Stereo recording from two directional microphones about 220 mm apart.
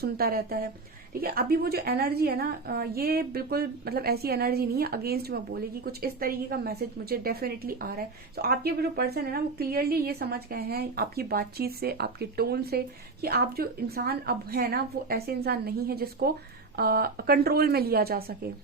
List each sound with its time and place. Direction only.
0.0 s a woman's voice: 45° right (ahead or behind)